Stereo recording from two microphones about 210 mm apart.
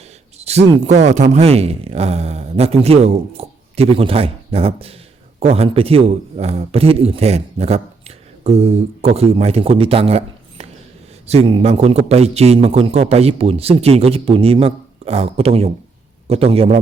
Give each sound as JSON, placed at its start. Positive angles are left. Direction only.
{"t": 0.3, "sound": "a man's voice", "side_deg": -30}